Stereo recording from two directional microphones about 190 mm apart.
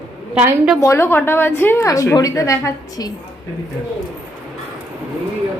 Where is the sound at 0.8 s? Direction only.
15° left (ahead or behind).